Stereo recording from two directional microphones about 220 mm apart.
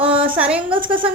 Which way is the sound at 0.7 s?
20° right (ahead or behind).